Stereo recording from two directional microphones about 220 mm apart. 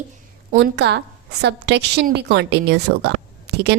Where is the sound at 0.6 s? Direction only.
50° right (ahead or behind).